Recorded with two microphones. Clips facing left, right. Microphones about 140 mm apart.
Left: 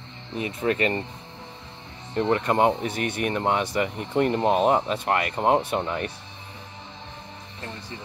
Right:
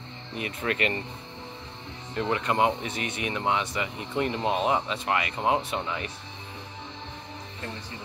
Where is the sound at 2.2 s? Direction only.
40° left (ahead or behind).